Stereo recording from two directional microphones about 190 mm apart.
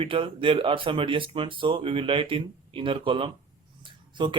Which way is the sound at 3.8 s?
25° right (ahead or behind).